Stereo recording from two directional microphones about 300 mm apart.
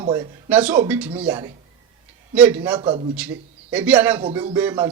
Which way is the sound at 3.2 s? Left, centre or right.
Centre.